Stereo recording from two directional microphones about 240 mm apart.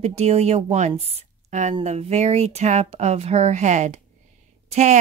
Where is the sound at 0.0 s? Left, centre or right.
Right.